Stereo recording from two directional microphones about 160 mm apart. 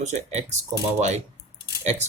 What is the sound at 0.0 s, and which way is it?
Speech, 45° right (ahead or behind).